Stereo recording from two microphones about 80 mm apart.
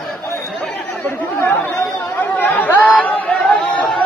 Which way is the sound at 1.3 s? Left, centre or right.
Left.